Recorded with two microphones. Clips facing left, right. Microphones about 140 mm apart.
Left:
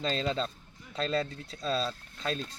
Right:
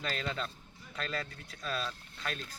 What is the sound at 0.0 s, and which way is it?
Speech, 25° left (ahead or behind).